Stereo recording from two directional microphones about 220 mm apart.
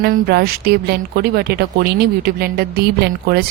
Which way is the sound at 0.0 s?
45° right (ahead or behind).